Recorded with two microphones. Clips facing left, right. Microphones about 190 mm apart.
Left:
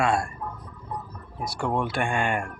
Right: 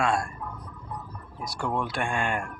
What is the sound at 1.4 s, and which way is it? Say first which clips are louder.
Speech: left 3 dB; centre (ahead or behind).